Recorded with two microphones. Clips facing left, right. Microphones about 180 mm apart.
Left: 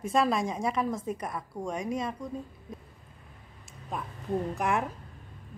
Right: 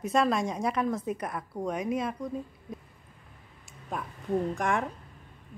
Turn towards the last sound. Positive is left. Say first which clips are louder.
# even
turn(degrees=5)  # may be behind; listen again after turning